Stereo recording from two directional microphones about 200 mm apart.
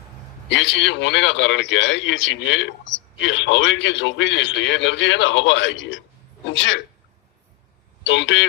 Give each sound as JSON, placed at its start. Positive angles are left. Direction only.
{"t": 0.4, "sound": "a man's voice", "side_deg": 65}
{"t": 8.0, "sound": "a man's voice", "side_deg": 65}